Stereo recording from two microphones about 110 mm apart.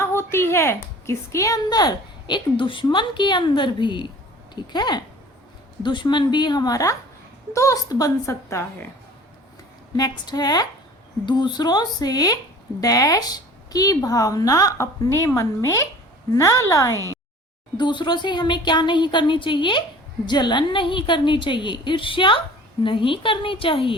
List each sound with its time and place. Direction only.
0.0 s a woman's voice: 25° left (ahead or behind)
10.0 s a woman's voice: 35° left (ahead or behind)
17.7 s a woman's voice: 45° left (ahead or behind)